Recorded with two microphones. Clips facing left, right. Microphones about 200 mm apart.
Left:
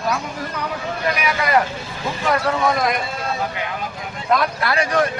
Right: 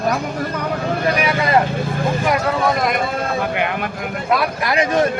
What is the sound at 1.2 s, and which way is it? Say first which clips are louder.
Speech: right 1 dB; 25° right (ahead or behind).